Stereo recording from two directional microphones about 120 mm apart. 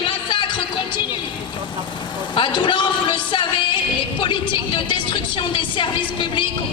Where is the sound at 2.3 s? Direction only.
40° left (ahead or behind).